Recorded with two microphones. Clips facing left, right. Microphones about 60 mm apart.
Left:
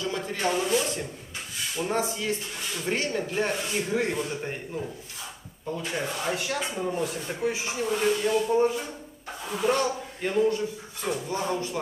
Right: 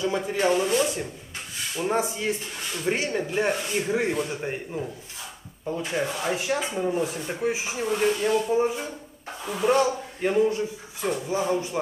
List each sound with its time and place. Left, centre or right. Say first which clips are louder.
0.0 s speech: right 4 dB; centre